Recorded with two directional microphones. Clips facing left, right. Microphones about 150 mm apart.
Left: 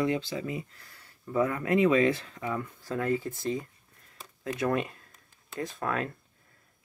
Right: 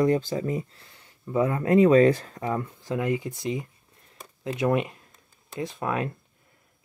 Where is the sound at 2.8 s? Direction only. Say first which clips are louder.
Right 2 dB; 15° right (ahead or behind).